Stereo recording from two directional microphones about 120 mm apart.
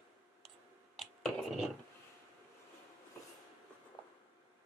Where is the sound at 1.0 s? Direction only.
Centre (ahead or behind).